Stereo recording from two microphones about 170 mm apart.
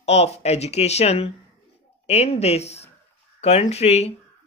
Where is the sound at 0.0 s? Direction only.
40° left (ahead or behind).